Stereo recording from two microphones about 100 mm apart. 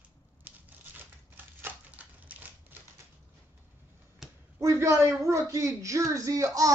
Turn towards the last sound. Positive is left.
turn(degrees=-35)  # may be behind; listen again after turning